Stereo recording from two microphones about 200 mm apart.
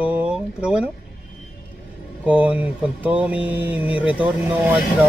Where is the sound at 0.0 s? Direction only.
5° right (ahead or behind).